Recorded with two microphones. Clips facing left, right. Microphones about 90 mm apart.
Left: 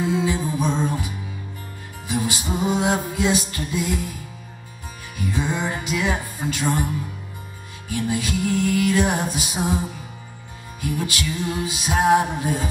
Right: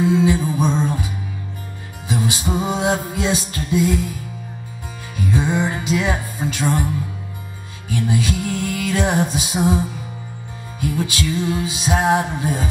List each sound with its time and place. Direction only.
0.0 s music: 20° right (ahead or behind)
2.0 s music: 20° right (ahead or behind)
5.1 s music: 20° right (ahead or behind)
8.0 s music: 20° right (ahead or behind)
11.1 s music: 20° right (ahead or behind)